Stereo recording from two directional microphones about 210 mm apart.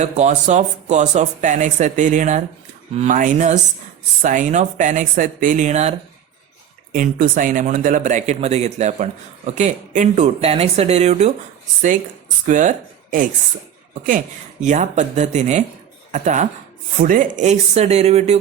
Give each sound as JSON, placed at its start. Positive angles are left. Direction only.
{"t": 0.0, "sound": "speech", "side_deg": -35}
{"t": 6.9, "sound": "speech", "side_deg": -40}
{"t": 12.5, "sound": "speech", "side_deg": -35}
{"t": 14.6, "sound": "speech", "side_deg": -35}